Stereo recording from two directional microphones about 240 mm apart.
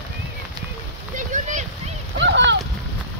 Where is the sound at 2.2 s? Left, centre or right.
Right.